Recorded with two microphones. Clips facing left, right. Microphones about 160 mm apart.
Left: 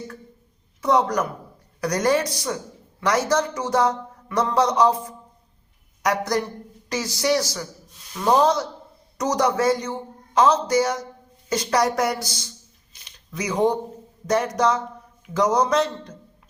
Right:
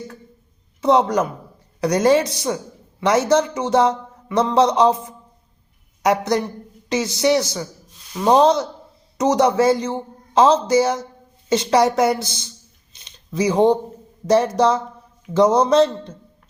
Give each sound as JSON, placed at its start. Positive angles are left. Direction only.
{"t": 0.8, "sound": "speech", "side_deg": -25}
{"t": 12.9, "sound": "a sound", "side_deg": -20}
{"t": 14.3, "sound": "speech", "side_deg": -30}